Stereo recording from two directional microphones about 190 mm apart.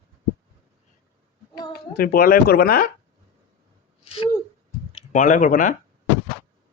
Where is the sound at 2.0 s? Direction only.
50° left (ahead or behind).